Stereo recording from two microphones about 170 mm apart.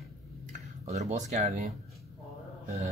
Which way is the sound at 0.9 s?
45° right (ahead or behind).